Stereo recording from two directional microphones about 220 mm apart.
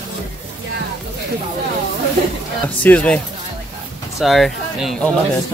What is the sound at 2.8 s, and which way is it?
Speech, 5° left (ahead or behind).